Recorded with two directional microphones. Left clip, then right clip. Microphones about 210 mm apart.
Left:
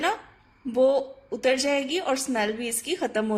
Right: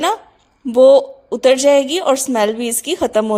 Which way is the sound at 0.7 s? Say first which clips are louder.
Right 13 dB; 35° right (ahead or behind).